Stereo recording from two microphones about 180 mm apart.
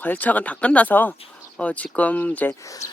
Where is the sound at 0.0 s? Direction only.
10° left (ahead or behind).